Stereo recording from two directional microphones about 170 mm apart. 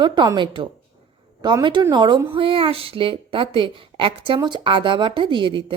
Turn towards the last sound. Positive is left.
turn(degrees=-30)  # may be behind; listen again after turning